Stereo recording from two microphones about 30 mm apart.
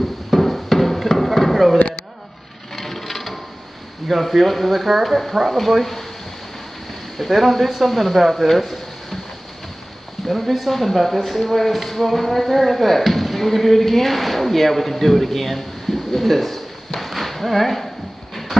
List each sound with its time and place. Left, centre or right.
0.3 s music: centre
2.7 s wood: centre
4.1 s speech: centre
7.2 s speech: centre
8.5 s a sound: centre
10.7 s speech: centre